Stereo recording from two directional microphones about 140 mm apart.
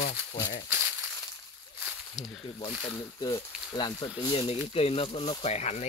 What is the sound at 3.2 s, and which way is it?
Speech, 25° left (ahead or behind).